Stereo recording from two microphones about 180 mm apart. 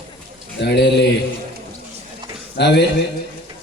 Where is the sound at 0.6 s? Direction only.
75° left (ahead or behind).